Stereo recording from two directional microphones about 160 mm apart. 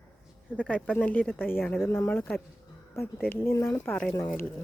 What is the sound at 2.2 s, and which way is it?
Speech, centre (ahead or behind).